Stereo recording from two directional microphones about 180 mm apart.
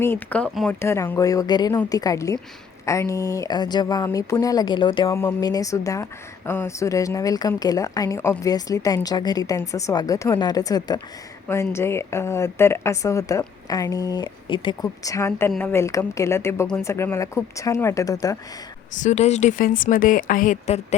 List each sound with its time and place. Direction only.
0.0 s speech: 10° left (ahead or behind)
18.9 s speech: 40° left (ahead or behind)